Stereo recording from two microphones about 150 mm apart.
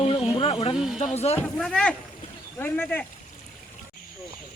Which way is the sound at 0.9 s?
45° left (ahead or behind).